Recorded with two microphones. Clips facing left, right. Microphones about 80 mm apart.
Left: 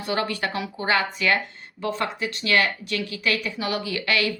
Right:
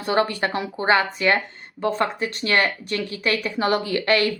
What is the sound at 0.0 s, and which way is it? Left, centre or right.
Speech, right.